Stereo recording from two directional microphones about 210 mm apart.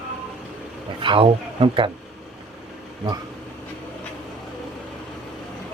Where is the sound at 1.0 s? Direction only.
25° right (ahead or behind).